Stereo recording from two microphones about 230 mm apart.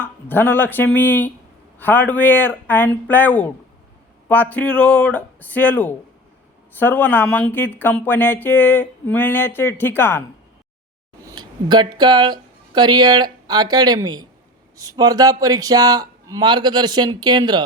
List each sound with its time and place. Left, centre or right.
0.0 s speech: centre
11.3 s speech: centre